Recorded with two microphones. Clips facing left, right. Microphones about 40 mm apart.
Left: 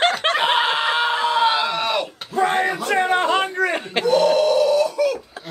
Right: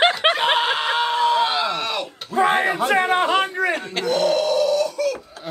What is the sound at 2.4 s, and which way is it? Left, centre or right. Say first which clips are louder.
A man's voice: right 1 dB; centre.